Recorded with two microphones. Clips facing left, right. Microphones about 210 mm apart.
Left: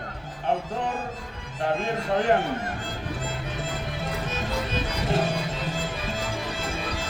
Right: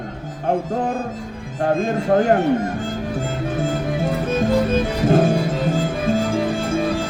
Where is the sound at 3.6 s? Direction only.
50° right (ahead or behind).